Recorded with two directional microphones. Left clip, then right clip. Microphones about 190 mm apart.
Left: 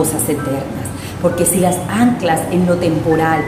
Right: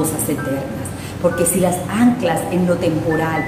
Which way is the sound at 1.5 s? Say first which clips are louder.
Left 2 dB; 15° left (ahead or behind).